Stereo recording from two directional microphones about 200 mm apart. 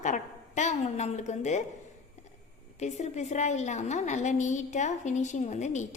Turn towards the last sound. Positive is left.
turn(degrees=35)  # may be behind; listen again after turning